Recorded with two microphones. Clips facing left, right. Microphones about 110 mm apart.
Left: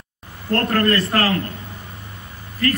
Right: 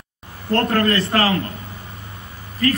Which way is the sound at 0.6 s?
25° right (ahead or behind).